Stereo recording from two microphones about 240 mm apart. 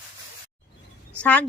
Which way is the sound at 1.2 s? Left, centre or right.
Centre.